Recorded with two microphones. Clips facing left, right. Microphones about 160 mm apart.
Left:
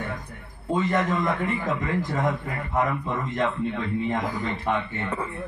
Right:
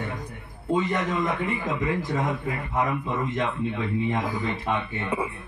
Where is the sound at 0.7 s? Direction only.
15° right (ahead or behind).